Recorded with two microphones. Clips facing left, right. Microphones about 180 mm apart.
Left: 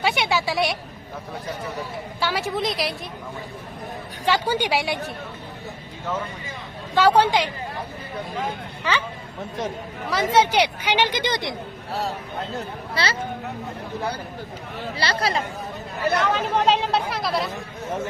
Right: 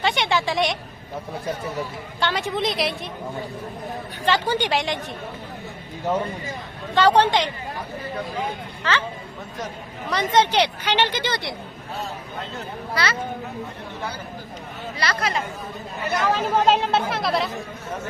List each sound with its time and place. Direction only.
0.0 s speech: 10° left (ahead or behind)
2.2 s speech: centre (ahead or behind)
4.3 s speech: 10° left (ahead or behind)
6.9 s speech: 10° left (ahead or behind)
8.8 s speech: 10° left (ahead or behind)
10.1 s speech: 5° left (ahead or behind)
12.5 s speech: 30° left (ahead or behind)
14.9 s speech: 30° left (ahead or behind)
16.3 s speech: centre (ahead or behind)